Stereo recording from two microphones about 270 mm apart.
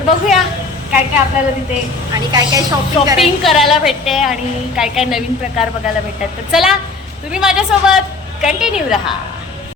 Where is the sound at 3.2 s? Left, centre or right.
Centre.